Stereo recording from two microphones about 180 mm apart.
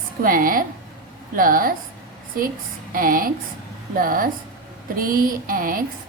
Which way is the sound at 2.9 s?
50° right (ahead or behind).